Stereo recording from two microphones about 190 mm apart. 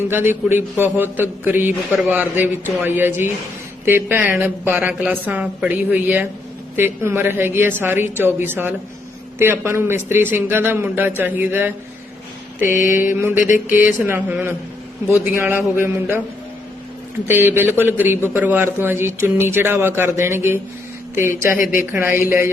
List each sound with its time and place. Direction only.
0.1 s a man's voice: 10° right (ahead or behind)
12.6 s mantra: 45° left (ahead or behind)
12.9 s a man's voice: 15° right (ahead or behind)
17.2 s a man's voice: 10° right (ahead or behind)
21.6 s mantra: 45° left (ahead or behind)
21.9 s a man's voice: 15° right (ahead or behind)